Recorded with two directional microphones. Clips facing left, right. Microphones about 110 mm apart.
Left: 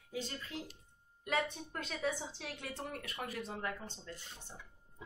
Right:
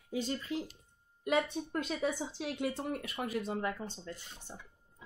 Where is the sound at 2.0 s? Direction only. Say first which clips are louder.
Right 4 dB; 15° right (ahead or behind).